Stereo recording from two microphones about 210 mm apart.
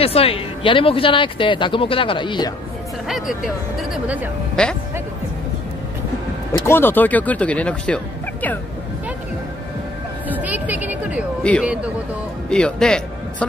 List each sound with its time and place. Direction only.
0.0 s speech: 25° left (ahead or behind)
3.1 s speech: centre (ahead or behind)
6.6 s speech: 10° left (ahead or behind)
10.2 s music: 10° right (ahead or behind)
11.6 s speech: 5° right (ahead or behind)